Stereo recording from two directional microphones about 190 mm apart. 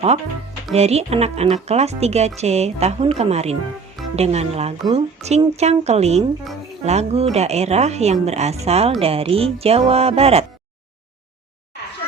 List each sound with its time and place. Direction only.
0.7 s a woman's voice: 35° right (ahead or behind)